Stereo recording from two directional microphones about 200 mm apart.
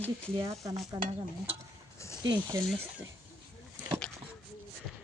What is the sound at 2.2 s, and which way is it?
Speech, 20° right (ahead or behind).